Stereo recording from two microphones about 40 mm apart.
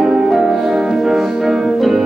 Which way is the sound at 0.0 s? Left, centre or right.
Centre.